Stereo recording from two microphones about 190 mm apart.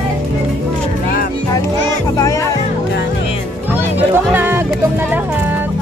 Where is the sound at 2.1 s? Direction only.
15° left (ahead or behind).